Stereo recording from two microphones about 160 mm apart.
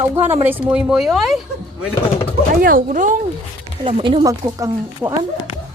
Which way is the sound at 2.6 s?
65° right (ahead or behind).